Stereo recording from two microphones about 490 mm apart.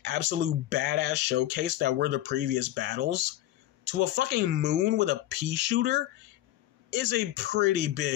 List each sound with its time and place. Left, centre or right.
0.0 s speech: centre